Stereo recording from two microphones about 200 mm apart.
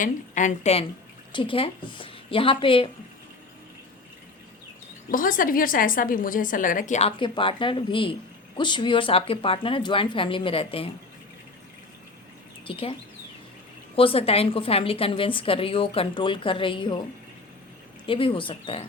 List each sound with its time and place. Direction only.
0.0 s a woman's voice: 40° left (ahead or behind)
5.1 s a woman's voice: 45° left (ahead or behind)
7.2 s a woman's voice: 25° left (ahead or behind)
12.6 s a woman's voice: 25° left (ahead or behind)
18.0 s a woman's voice: 25° left (ahead or behind)